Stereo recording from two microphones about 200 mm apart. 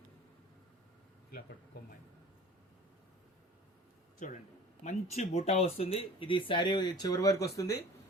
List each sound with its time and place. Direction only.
1.3 s speech: 50° left (ahead or behind)
4.8 s speech: 35° left (ahead or behind); by 7.8 s 15° left (ahead or behind)